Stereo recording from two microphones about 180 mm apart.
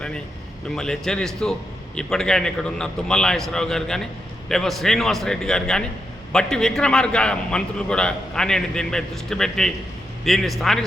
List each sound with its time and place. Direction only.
0.8 s a man's voice: 5° left (ahead or behind)